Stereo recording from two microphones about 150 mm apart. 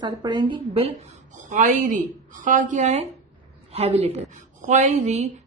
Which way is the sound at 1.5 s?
60° right (ahead or behind).